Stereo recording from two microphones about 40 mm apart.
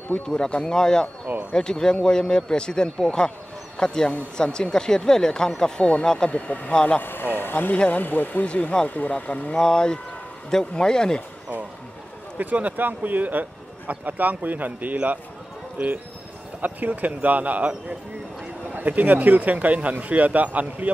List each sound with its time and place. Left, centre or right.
0.3 s a man's voice: centre
3.3 s a sound: left
4.4 s a man's voice: left
6.3 s speech: left
6.7 s a man's voice: left
7.0 s speech: left
8.5 s speech: left
9.6 s a man's voice: centre
12.4 s speech: right
15.8 s speech: right
16.6 s speech: right